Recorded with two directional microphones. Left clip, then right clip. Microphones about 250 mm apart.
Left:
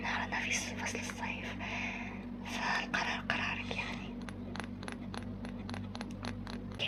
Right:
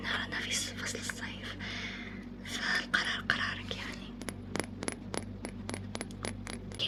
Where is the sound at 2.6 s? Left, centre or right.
Right.